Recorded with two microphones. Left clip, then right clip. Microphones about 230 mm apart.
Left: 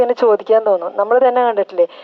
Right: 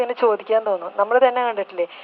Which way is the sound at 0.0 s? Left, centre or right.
Left.